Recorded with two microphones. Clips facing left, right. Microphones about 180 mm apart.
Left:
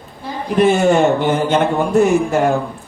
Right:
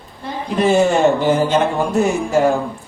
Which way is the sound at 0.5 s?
60° left (ahead or behind).